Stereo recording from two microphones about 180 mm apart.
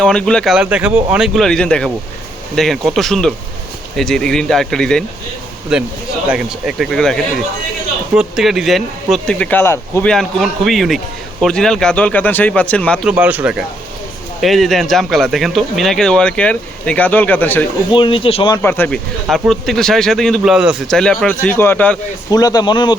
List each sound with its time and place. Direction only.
0.0 s a man's voice: 5° left (ahead or behind)
10.1 s a man's voice: centre (ahead or behind)
13.1 s a man's voice: 10° right (ahead or behind); by 17.7 s 10° left (ahead or behind)
17.9 s speech: 30° left (ahead or behind)
18.5 s a man's voice: 10° left (ahead or behind)
22.3 s speech: 20° left (ahead or behind)